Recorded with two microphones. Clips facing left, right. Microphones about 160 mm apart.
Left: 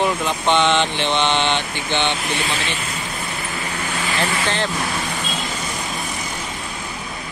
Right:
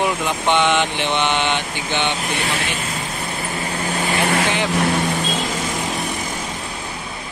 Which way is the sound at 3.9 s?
35° right (ahead or behind).